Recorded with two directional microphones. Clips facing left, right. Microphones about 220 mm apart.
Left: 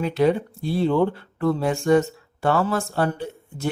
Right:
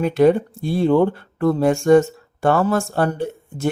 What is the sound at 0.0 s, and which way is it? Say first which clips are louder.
Speech: right 5 dB; 50° right (ahead or behind).